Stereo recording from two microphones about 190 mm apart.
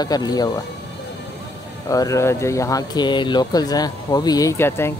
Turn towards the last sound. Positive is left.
turn(degrees=15)  # may be behind; listen again after turning